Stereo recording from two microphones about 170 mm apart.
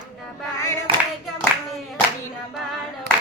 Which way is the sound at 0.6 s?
15° left (ahead or behind).